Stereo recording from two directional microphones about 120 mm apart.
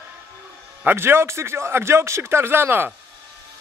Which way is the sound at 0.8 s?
20° right (ahead or behind).